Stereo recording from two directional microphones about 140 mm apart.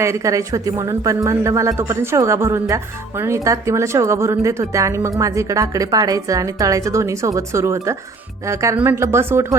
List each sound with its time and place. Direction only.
0.0 s speech: 20° right (ahead or behind)